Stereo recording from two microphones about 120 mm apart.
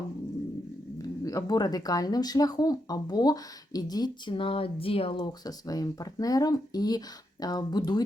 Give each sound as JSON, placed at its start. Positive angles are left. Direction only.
{"t": 1.0, "sound": "speech", "side_deg": 30}